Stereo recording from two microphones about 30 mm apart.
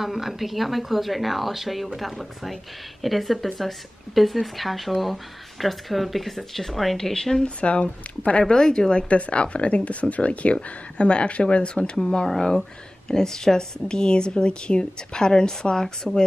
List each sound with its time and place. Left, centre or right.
0.0 s speech: centre
7.0 s speech: centre
7.4 s speech: left
8.5 s a woman's voice: left
9.1 s a woman's voice: left